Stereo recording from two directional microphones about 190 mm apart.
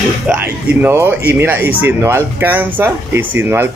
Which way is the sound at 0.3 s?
10° right (ahead or behind).